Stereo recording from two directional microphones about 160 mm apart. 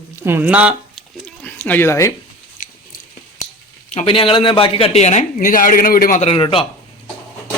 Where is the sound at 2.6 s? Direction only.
55° left (ahead or behind).